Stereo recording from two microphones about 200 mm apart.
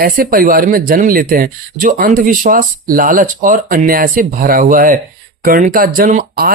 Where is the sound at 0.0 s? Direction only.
45° right (ahead or behind).